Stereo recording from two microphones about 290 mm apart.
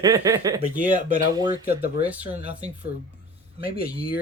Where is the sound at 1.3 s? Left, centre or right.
Centre.